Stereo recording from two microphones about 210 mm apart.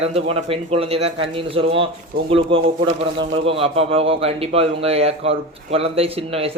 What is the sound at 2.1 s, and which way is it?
Speech, 45° right (ahead or behind).